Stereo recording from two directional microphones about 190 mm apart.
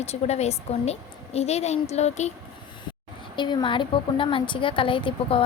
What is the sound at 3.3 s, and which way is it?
A woman's voice, 25° left (ahead or behind).